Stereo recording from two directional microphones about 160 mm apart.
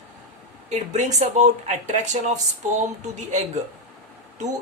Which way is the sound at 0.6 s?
45° right (ahead or behind).